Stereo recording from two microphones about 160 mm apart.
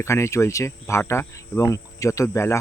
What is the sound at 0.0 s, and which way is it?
Speech, 20° left (ahead or behind).